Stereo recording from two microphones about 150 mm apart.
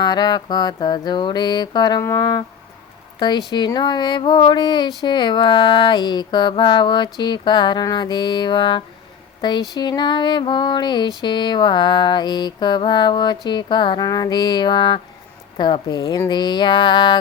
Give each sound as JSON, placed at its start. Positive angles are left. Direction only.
{"t": 0.0, "sound": "mantra", "side_deg": 25}
{"t": 3.2, "sound": "speech", "side_deg": 30}
{"t": 3.5, "sound": "mantra", "side_deg": 30}